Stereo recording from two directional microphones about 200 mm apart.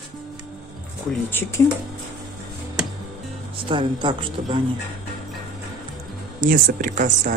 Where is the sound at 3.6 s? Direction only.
25° right (ahead or behind).